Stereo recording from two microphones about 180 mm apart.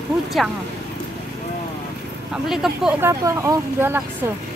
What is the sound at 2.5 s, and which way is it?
Speech, 5° right (ahead or behind).